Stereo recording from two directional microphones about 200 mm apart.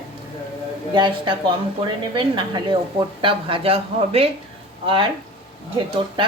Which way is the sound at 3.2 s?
30° right (ahead or behind).